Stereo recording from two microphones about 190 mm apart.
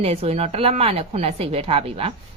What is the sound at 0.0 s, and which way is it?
A woman's voice, 30° right (ahead or behind).